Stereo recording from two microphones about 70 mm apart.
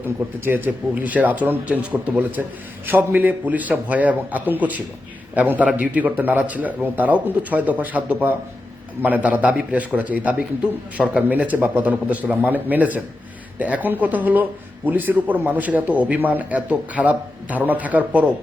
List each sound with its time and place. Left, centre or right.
0.3 s a man's voice: right